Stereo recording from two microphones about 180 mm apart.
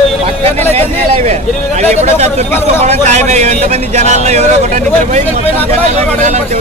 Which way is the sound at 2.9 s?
40° right (ahead or behind).